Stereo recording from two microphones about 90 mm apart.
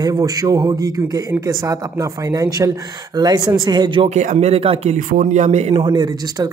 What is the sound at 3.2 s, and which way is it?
Speech, 50° right (ahead or behind).